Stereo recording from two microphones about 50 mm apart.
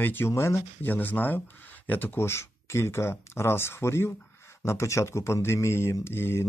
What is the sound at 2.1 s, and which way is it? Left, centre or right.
Speech, left.